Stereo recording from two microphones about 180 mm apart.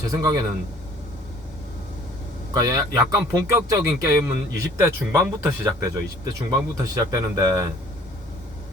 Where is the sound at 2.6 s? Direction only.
20° right (ahead or behind).